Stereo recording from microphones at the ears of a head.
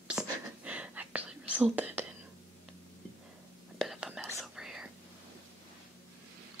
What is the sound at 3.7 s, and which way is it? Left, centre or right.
Whispering, centre.